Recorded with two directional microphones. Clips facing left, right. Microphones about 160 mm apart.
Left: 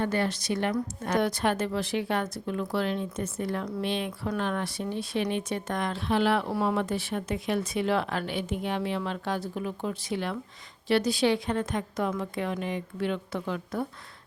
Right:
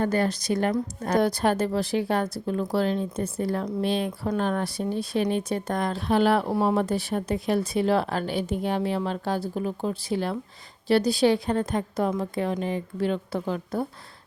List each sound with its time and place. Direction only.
0.0 s speech: 40° right (ahead or behind)